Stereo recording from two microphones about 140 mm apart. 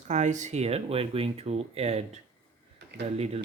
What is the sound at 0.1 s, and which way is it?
Speech, 60° right (ahead or behind).